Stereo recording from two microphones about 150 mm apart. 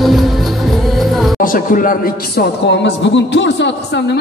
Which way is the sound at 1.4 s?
65° left (ahead or behind).